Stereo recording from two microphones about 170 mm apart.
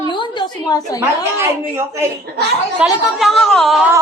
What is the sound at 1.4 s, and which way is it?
Speech, 15° right (ahead or behind).